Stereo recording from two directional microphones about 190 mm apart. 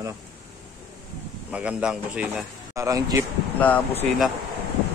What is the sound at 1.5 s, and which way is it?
Speech, 5° right (ahead or behind).